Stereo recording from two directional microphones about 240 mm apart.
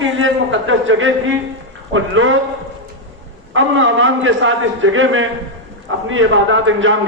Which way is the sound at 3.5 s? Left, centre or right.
Right.